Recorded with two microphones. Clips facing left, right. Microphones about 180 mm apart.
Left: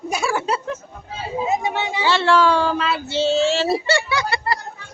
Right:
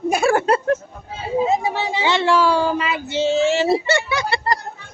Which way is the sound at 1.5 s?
35° right (ahead or behind).